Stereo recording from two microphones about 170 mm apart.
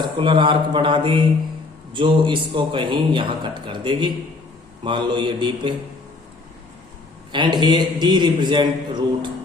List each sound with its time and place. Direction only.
0.0 s a man's voice: 30° right (ahead or behind)
7.3 s a man's voice: 25° right (ahead or behind)